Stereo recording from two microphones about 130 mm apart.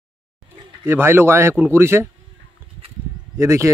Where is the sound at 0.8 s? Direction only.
15° right (ahead or behind).